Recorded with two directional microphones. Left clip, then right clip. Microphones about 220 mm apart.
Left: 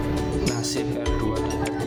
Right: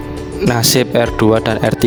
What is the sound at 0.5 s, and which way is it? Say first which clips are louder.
Music: right 14 dB; 50° right (ahead or behind).